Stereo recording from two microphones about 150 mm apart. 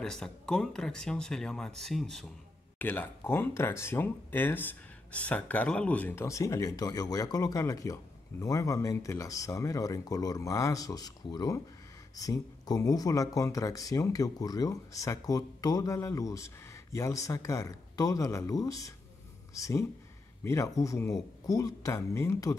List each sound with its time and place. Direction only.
0.0 s speech: 5° left (ahead or behind)
2.8 s speech: 10° left (ahead or behind)